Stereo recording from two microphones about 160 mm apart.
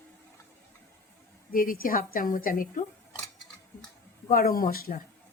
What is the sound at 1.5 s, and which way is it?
A woman's voice, 60° left (ahead or behind).